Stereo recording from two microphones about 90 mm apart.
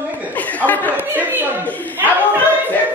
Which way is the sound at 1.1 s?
20° right (ahead or behind).